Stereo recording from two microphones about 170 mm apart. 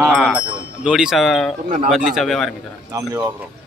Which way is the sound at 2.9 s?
20° right (ahead or behind).